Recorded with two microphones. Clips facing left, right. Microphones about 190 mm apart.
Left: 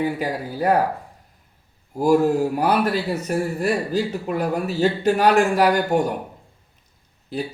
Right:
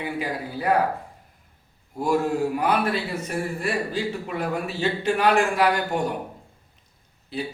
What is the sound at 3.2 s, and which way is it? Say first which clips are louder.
A man's voice: left 6 dB; 40° left (ahead or behind).